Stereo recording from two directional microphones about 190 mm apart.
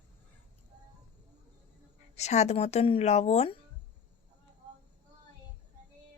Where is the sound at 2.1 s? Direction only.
35° left (ahead or behind).